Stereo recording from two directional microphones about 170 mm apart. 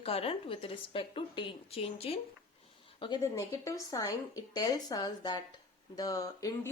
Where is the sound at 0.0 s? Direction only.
35° left (ahead or behind).